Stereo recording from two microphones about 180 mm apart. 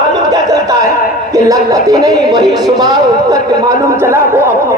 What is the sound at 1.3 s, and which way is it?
A man's voice, 20° right (ahead or behind).